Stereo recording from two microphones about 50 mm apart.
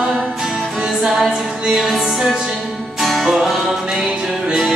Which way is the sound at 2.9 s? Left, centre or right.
Centre.